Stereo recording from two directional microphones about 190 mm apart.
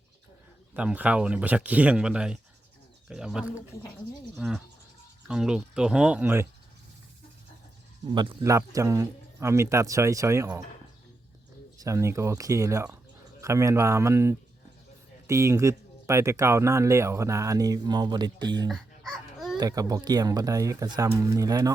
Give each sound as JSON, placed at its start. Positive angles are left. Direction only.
{"t": 0.7, "sound": "speech", "side_deg": -5}
{"t": 8.1, "sound": "speech", "side_deg": -20}
{"t": 11.8, "sound": "speech", "side_deg": -15}
{"t": 18.7, "sound": "babbling", "side_deg": 0}
{"t": 19.5, "sound": "speech", "side_deg": -20}